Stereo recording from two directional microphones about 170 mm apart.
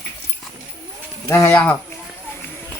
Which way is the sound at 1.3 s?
20° left (ahead or behind).